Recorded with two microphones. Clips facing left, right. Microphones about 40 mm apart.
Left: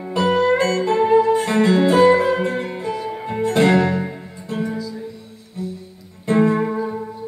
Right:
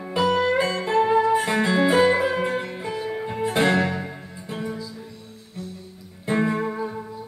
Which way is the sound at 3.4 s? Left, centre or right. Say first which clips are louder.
Left 5 dB; centre.